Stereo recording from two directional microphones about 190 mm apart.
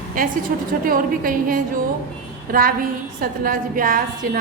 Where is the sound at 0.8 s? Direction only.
45° right (ahead or behind).